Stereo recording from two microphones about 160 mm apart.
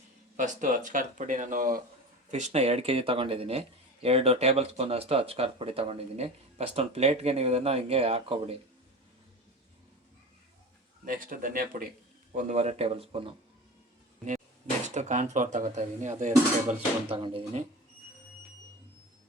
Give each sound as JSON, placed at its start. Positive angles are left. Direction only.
{"t": 0.3, "sound": "speech", "side_deg": -50}
{"t": 2.3, "sound": "speech", "side_deg": -45}
{"t": 11.0, "sound": "speech", "side_deg": -60}
{"t": 12.3, "sound": "speech", "side_deg": -50}
{"t": 14.8, "sound": "speech", "side_deg": -50}
{"t": 17.1, "sound": "speech", "side_deg": -35}